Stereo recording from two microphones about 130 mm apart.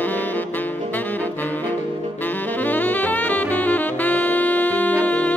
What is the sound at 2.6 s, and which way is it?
Saxophone, 15° left (ahead or behind).